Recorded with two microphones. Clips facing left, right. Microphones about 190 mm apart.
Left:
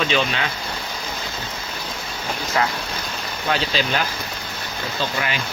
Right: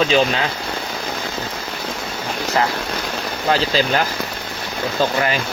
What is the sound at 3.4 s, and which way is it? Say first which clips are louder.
Speech: right 5 dB; 40° right (ahead or behind).